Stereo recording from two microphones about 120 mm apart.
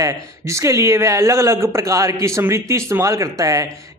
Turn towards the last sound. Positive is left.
turn(degrees=-30)  # may be behind; listen again after turning